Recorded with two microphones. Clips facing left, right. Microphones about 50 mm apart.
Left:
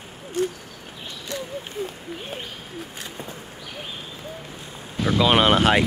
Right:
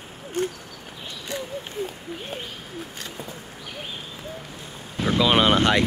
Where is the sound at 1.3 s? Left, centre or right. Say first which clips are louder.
Even; right.